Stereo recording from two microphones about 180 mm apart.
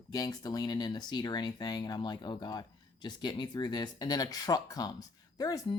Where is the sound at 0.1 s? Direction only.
20° left (ahead or behind).